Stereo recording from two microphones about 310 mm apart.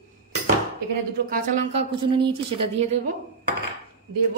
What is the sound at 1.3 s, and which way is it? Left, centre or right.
A woman's voice, right.